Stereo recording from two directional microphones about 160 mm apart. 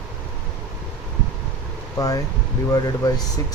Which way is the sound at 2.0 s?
20° left (ahead or behind).